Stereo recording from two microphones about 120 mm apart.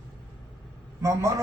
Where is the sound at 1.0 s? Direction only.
25° right (ahead or behind).